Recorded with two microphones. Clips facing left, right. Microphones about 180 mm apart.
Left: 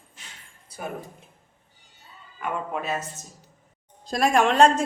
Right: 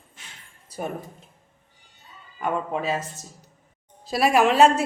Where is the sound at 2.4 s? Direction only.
30° right (ahead or behind).